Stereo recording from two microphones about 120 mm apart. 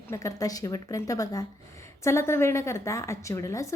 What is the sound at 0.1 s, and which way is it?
A woman's voice, 25° left (ahead or behind).